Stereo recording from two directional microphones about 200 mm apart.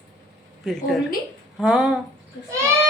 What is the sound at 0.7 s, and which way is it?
Speech, centre (ahead or behind).